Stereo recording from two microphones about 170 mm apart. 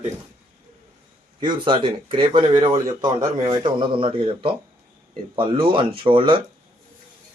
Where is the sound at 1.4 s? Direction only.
30° right (ahead or behind).